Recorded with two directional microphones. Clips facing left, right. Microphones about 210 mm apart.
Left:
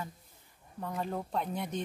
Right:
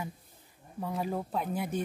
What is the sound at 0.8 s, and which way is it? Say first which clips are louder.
Speech: right 2 dB; 5° right (ahead or behind).